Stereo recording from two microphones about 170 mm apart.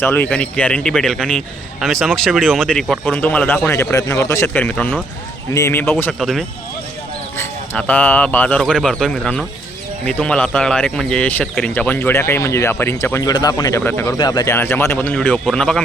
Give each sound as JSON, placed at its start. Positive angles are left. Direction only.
{"t": 0.0, "sound": "a man's voice", "side_deg": 10}
{"t": 5.5, "sound": "a man's voice", "side_deg": 15}
{"t": 7.3, "sound": "a man's voice", "side_deg": 10}